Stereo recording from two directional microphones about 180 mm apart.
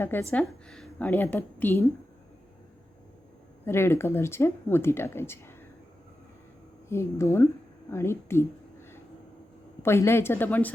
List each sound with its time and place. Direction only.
0.0 s speech: 10° left (ahead or behind)
3.7 s speech: 15° left (ahead or behind)
6.8 s speech: 15° left (ahead or behind)
9.8 s speech: 15° left (ahead or behind)